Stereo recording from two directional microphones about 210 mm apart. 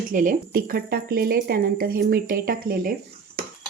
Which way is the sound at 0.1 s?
40° right (ahead or behind).